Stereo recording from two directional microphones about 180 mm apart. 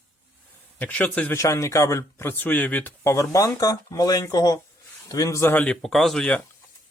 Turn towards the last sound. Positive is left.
turn(degrees=5)  # may be behind; listen again after turning